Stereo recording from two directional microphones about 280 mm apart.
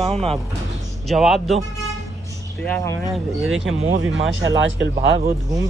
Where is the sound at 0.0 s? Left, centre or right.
Right.